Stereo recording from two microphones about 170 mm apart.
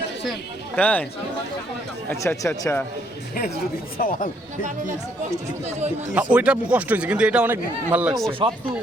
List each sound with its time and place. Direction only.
0.8 s speech: 10° left (ahead or behind)
2.0 s speech: 15° left (ahead or behind)
3.9 s speech: 55° left (ahead or behind)
6.1 s a man's voice: 5° right (ahead or behind)
8.3 s speech: 30° right (ahead or behind)